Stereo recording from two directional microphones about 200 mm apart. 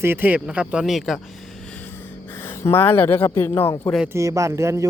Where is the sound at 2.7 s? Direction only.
10° left (ahead or behind).